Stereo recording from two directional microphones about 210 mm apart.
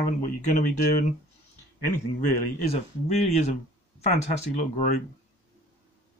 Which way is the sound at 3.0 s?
30° left (ahead or behind).